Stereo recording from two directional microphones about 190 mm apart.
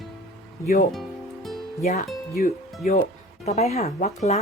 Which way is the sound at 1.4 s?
Centre (ahead or behind).